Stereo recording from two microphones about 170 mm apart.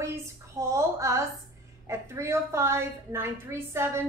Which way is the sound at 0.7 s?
15° right (ahead or behind).